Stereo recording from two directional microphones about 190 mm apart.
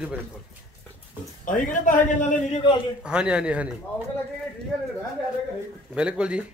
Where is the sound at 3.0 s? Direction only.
5° right (ahead or behind).